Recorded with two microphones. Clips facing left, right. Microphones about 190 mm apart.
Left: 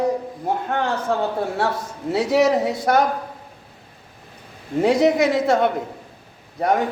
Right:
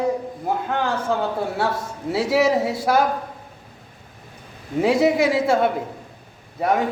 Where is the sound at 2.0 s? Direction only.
5° right (ahead or behind).